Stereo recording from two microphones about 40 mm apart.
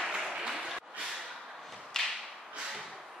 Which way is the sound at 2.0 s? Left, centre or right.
Centre.